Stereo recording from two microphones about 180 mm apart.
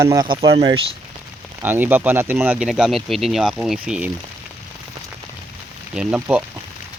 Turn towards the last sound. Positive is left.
turn(degrees=-5)  # may be behind; listen again after turning